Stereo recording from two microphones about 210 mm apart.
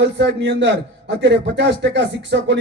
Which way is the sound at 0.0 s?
55° right (ahead or behind).